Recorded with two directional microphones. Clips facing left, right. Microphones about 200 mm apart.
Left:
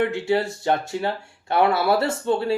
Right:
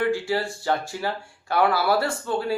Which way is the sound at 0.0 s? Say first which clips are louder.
Left 2 dB; 20° left (ahead or behind).